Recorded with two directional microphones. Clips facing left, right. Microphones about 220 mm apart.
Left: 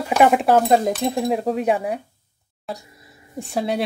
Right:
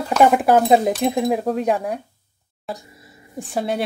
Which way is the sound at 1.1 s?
Centre (ahead or behind).